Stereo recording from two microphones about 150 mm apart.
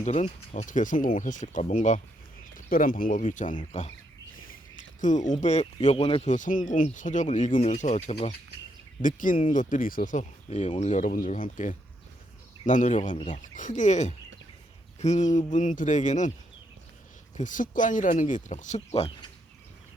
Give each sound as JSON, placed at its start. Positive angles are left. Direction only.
{"t": 0.0, "sound": "speech", "side_deg": 50}
{"t": 2.6, "sound": "speech", "side_deg": 70}
{"t": 4.4, "sound": "speech", "side_deg": 60}
{"t": 6.2, "sound": "speech", "side_deg": 55}
{"t": 9.0, "sound": "speech", "side_deg": 60}
{"t": 17.3, "sound": "speech", "side_deg": 60}